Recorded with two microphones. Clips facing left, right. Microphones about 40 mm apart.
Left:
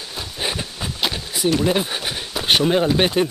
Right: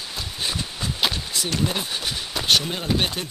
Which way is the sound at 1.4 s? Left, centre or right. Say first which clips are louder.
Left 8 dB; centre.